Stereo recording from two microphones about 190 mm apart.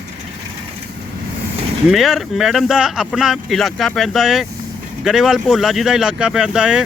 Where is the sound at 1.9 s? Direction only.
Centre (ahead or behind).